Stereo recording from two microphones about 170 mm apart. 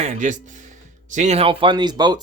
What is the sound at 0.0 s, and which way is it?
Speech, 45° right (ahead or behind).